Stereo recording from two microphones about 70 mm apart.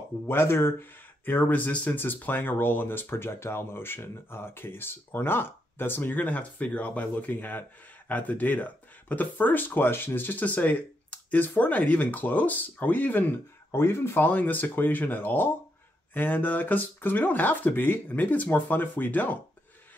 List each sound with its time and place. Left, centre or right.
0.3 s speech: left
13.7 s speech: left
14.2 s speech: left